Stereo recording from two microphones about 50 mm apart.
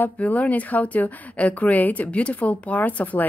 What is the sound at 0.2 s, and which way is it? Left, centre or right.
A woman's voice, left.